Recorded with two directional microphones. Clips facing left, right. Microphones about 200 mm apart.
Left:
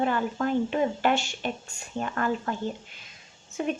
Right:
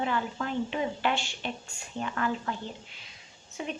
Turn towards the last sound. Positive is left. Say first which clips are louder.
# left 7 dB
turn(degrees=50)  # may be behind; listen again after turning